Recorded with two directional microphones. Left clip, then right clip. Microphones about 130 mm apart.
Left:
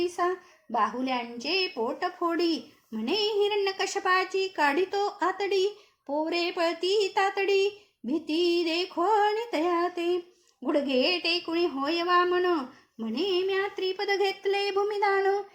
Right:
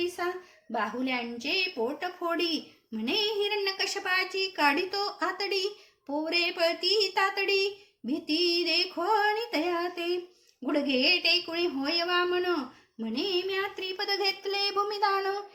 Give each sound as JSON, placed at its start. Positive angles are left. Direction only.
{"t": 0.7, "sound": "a woman's voice", "side_deg": 40}
{"t": 13.1, "sound": "child singing", "side_deg": 45}